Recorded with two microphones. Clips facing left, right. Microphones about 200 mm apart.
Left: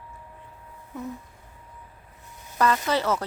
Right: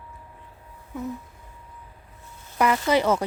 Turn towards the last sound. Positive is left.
turn(degrees=-15)  # may be behind; listen again after turning